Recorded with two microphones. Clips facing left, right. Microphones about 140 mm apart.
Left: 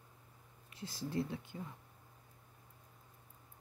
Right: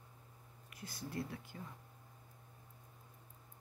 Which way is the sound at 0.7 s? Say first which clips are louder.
Left 5 dB; 25° left (ahead or behind).